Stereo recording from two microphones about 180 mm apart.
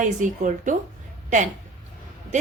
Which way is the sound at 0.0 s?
45° right (ahead or behind).